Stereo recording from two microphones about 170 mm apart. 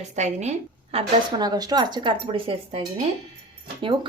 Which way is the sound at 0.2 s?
40° right (ahead or behind).